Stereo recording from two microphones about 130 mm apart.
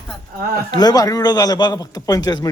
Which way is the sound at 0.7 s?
30° left (ahead or behind).